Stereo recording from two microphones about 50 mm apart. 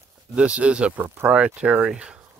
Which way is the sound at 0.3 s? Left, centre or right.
Right.